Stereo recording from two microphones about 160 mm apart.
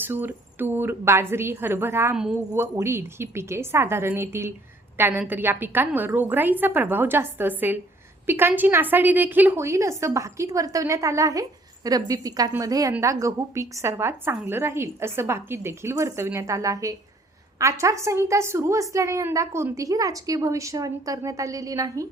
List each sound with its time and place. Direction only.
0.0 s a woman's voice: 10° right (ahead or behind)